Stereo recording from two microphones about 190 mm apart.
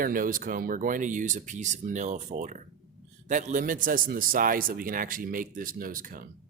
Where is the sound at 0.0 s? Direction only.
50° right (ahead or behind).